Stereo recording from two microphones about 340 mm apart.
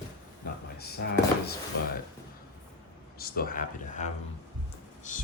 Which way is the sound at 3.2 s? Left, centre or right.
Left.